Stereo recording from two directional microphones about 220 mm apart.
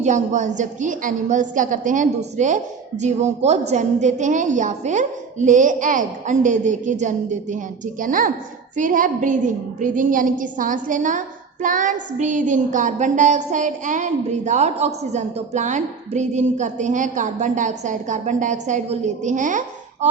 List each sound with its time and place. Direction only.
0.0 s a woman's voice: 35° right (ahead or behind)